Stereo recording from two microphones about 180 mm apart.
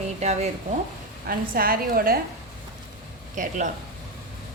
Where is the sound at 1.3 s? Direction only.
55° right (ahead or behind).